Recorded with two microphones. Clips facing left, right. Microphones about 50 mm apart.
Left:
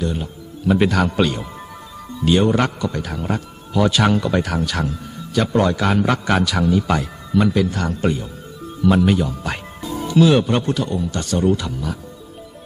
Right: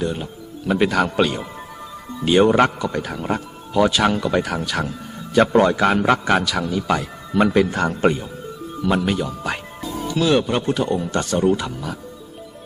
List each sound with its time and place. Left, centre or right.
0.0 s speech: centre
2.2 s speech: centre
5.3 s a man's voice: right
5.5 s a man's voice: centre
7.3 s a man's voice: right
8.8 s a man's voice: centre
10.8 s a man's voice: right
11.3 s speech: centre